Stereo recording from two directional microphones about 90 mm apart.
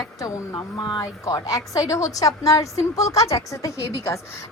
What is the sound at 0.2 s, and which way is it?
Speech, 45° left (ahead or behind).